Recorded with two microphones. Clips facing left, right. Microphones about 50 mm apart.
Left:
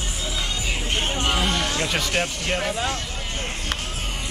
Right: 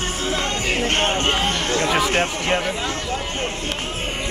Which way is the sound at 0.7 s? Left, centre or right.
Right.